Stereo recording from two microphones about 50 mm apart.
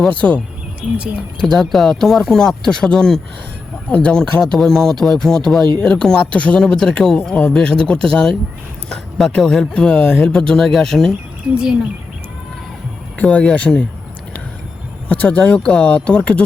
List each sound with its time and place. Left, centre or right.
0.1 s speech: left
0.3 s bird: right
1.4 s speech: centre
4.4 s speech: centre
11.5 s speech: centre
13.2 s speech: centre
15.1 s speech: left